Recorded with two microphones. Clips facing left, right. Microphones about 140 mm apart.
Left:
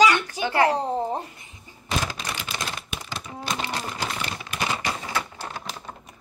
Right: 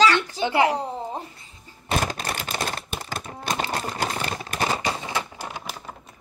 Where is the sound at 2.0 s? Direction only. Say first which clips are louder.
Right 3 dB; 50° right (ahead or behind); by 5.0 s 35° right (ahead or behind).